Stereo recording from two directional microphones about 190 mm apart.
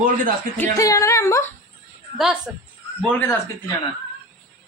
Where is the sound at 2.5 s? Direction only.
5° right (ahead or behind).